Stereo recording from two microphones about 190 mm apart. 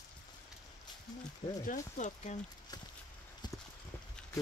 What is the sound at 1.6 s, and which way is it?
Speech, 45° left (ahead or behind).